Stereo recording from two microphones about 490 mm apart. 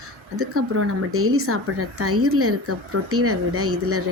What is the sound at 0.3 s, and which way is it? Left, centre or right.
Speech, right.